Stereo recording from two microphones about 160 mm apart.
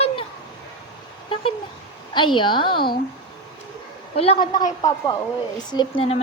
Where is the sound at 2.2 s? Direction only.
30° left (ahead or behind).